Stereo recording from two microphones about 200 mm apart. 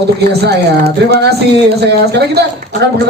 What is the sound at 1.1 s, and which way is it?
A man's voice, 55° right (ahead or behind).